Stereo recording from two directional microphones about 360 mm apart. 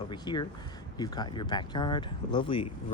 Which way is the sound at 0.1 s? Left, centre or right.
Centre.